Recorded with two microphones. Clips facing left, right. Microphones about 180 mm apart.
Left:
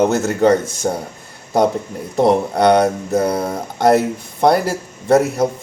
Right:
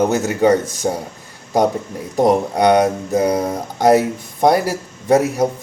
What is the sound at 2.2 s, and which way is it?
Speech, 15° right (ahead or behind).